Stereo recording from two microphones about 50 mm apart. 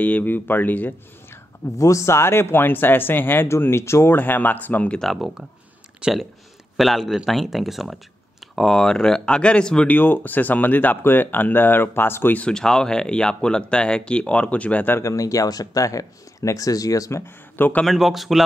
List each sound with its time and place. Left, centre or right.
0.0 s speech: left
1.8 s speech: left
3.7 s speech: left
4.1 s speech: left
5.0 s speech: centre
6.0 s speech: centre
6.8 s speech: centre
8.5 s speech: centre
9.8 s speech: left
12.4 s speech: centre; by 14.9 s left
15.0 s speech: left
17.1 s speech: left
17.6 s a man's voice: left
17.8 s speech: centre